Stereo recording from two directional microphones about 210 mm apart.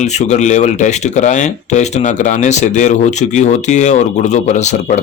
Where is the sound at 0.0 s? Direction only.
35° left (ahead or behind).